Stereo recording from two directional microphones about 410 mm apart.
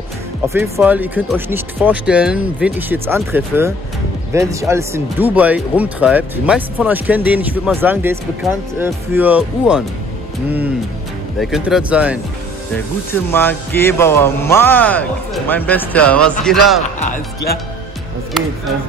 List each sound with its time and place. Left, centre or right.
0.5 s speech: centre
11.3 s speech: centre
13.3 s speech: centre
17.0 s speech: left